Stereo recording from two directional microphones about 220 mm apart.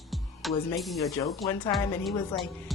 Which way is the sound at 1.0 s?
15° left (ahead or behind).